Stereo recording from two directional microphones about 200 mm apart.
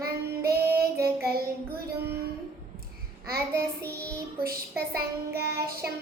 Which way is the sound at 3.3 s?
50° right (ahead or behind).